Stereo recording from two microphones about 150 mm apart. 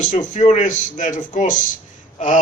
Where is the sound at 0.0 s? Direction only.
55° left (ahead or behind).